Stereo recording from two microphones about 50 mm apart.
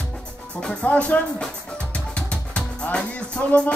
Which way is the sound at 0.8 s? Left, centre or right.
Left.